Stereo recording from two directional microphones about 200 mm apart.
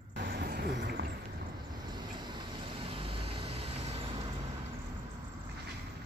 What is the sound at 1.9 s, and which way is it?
Vehicle, 20° right (ahead or behind).